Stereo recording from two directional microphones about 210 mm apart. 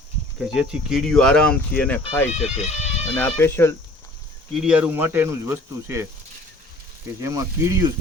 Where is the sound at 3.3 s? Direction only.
10° left (ahead or behind).